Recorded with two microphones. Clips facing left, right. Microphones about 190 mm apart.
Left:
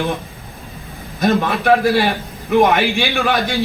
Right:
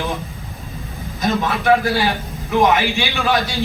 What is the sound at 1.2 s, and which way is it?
A man's voice, 55° left (ahead or behind).